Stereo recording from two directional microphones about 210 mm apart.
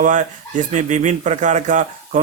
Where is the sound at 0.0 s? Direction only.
35° right (ahead or behind).